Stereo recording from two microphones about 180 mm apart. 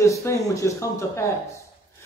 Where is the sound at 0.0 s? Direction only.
15° left (ahead or behind).